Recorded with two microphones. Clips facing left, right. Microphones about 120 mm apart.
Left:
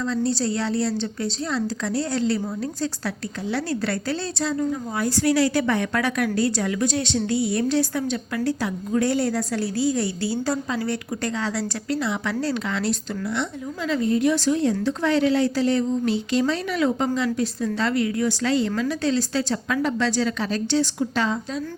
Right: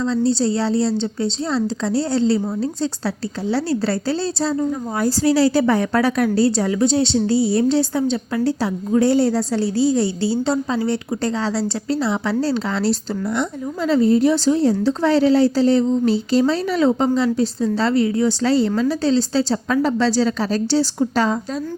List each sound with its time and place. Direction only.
0.0 s a woman's voice: 30° right (ahead or behind)